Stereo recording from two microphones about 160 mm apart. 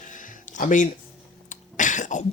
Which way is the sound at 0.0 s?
55° left (ahead or behind).